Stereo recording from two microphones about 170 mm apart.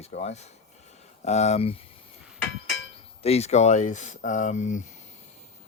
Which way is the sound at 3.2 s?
35° left (ahead or behind).